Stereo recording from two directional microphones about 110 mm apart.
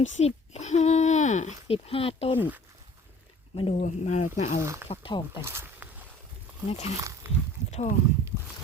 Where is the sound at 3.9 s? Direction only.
90° left.